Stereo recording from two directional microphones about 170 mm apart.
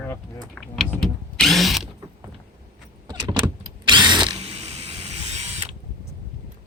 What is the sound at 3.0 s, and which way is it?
Vehicle, 25° right (ahead or behind).